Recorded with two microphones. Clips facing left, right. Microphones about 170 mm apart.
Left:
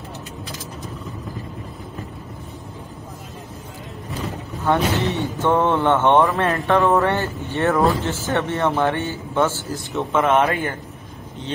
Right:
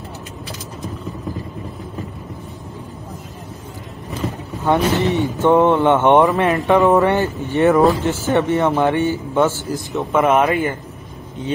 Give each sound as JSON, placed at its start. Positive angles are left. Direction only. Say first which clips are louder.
{"t": 4.6, "sound": "speech", "louder": "right 3 dB", "side_deg": -15}
{"t": 10.3, "sound": "speech", "louder": "right 1 dB", "side_deg": 0}